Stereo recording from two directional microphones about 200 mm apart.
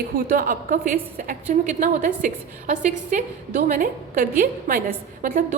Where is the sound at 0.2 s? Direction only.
45° right (ahead or behind).